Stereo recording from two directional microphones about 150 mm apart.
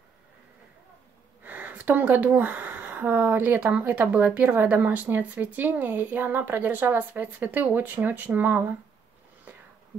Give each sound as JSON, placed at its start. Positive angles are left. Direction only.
{"t": 1.4, "sound": "a woman's voice", "side_deg": -10}